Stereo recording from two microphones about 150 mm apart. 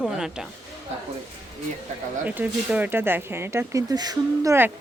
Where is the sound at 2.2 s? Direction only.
10° right (ahead or behind).